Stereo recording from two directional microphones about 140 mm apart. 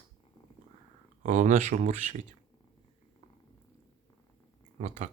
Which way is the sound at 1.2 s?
60° right (ahead or behind).